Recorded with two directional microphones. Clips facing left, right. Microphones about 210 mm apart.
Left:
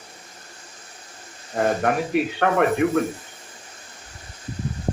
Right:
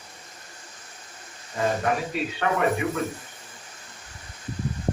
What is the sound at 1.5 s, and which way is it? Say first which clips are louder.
A man's voice: left 4 dB; 60° left (ahead or behind).